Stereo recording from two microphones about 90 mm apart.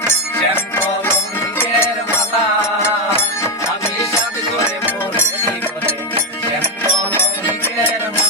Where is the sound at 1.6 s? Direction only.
25° left (ahead or behind).